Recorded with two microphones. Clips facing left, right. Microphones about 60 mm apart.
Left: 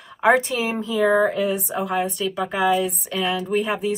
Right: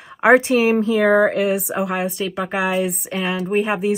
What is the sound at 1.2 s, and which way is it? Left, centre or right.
Speech, right.